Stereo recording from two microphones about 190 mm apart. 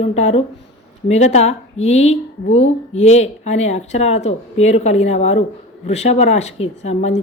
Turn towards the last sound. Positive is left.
turn(degrees=35)  # may be behind; listen again after turning